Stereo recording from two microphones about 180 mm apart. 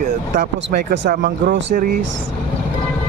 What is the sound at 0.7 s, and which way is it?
Speech, 80° right.